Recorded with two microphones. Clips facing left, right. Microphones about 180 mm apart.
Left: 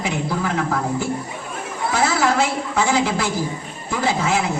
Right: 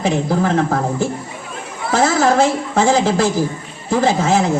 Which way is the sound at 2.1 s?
45° right (ahead or behind).